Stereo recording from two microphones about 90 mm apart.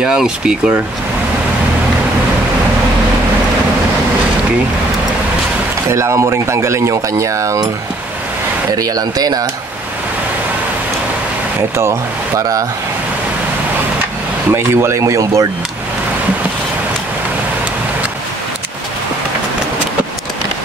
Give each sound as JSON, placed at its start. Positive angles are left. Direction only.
{"t": 0.0, "sound": "speech", "side_deg": -10}
{"t": 5.9, "sound": "speech", "side_deg": -30}
{"t": 8.7, "sound": "speech", "side_deg": -40}
{"t": 12.4, "sound": "speech", "side_deg": -40}
{"t": 14.5, "sound": "speech", "side_deg": -30}